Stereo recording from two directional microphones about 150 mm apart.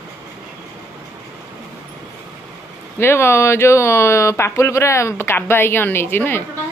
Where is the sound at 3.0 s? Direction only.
15° left (ahead or behind).